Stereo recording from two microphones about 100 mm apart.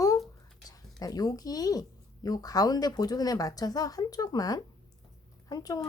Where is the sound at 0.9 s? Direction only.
40° left (ahead or behind).